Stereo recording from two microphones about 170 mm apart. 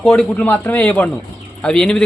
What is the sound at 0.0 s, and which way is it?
A man's voice, 5° left (ahead or behind).